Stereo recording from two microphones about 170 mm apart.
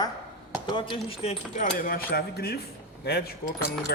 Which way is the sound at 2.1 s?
65° left (ahead or behind).